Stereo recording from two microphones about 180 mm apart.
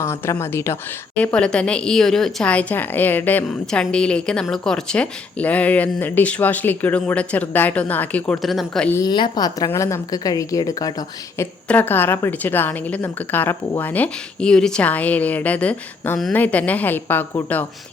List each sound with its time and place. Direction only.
0.0 s a woman's voice: 15° left (ahead or behind)
9.0 s a woman's voice: 25° left (ahead or behind)
11.7 s a woman's voice: 10° left (ahead or behind)